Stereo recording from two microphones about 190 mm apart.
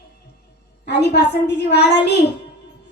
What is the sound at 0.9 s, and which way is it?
A woman's voice, 60° left (ahead or behind).